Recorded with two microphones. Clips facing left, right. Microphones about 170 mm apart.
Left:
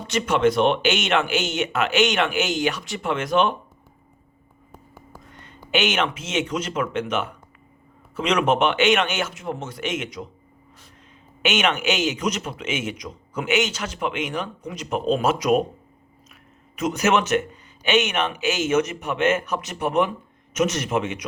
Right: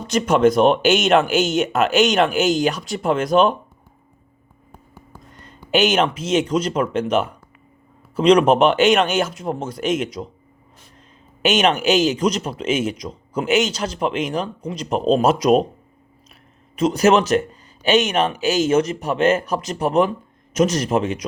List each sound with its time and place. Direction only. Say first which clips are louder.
0.1 s speech: right 4 dB; 40° right (ahead or behind)
5.3 s speech: right 5 dB; 40° right (ahead or behind)
11.4 s speech: right 5 dB; 35° right (ahead or behind)